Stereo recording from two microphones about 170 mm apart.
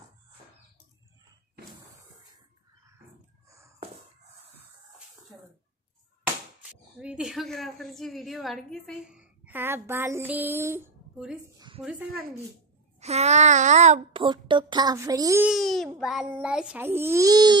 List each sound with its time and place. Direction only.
3.4 s a sound: 15° right (ahead or behind)
7.0 s a woman's voice: 5° right (ahead or behind); by 11.7 s 20° right (ahead or behind)
11.8 s a woman's voice: 5° right (ahead or behind)
13.0 s a sound: 40° right (ahead or behind)
14.1 s speech: 30° right (ahead or behind)
15.4 s a woman's voice: centre (ahead or behind); by 17.6 s 20° right (ahead or behind)